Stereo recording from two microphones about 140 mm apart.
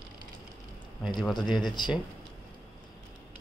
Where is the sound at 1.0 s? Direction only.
Centre (ahead or behind).